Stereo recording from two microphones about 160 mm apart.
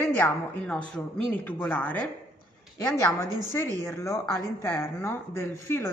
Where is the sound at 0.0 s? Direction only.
15° left (ahead or behind).